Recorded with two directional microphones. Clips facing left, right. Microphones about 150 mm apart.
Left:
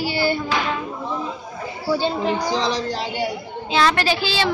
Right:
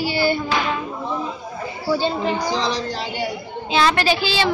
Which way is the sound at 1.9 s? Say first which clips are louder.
Even; centre (ahead or behind).